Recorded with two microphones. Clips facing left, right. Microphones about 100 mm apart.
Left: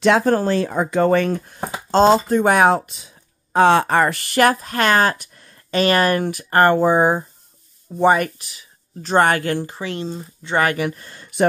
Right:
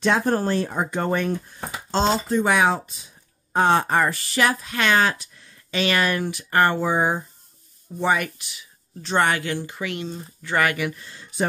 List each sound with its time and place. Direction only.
0.0 s speech: 90° left
1.6 s speech: 50° left (ahead or behind); by 3.1 s 65° left (ahead or behind)
3.5 s speech: 90° left; by 9.8 s 45° left (ahead or behind)
9.8 s speech: 30° left (ahead or behind); by 11.4 s 60° left (ahead or behind)